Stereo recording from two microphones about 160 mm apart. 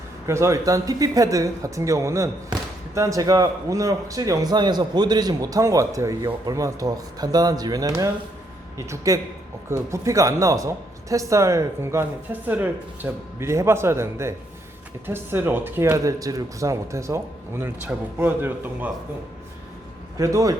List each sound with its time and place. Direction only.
0.3 s a woman's voice: 20° right (ahead or behind)
20.1 s speech: 20° right (ahead or behind)